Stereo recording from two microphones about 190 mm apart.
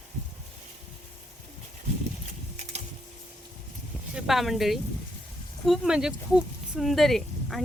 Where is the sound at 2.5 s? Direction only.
35° right (ahead or behind).